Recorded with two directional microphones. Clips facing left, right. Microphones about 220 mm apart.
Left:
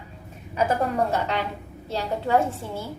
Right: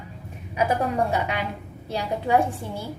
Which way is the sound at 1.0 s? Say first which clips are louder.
Even; 10° right (ahead or behind).